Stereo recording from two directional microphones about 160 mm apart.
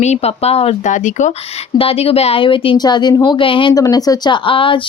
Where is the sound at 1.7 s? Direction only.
35° left (ahead or behind).